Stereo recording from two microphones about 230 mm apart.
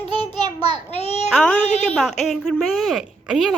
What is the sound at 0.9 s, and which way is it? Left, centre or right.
Speech, left.